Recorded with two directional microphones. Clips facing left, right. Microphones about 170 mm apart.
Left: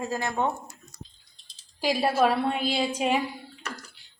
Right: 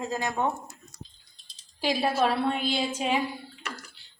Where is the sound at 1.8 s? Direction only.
10° left (ahead or behind).